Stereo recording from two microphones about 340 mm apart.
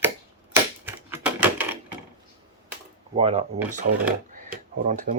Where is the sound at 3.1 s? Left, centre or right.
Centre.